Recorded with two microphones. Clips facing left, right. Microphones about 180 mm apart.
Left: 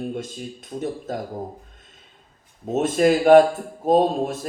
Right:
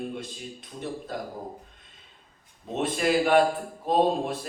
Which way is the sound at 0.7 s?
55° left (ahead or behind).